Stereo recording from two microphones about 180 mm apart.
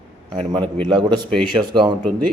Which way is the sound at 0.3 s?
30° right (ahead or behind).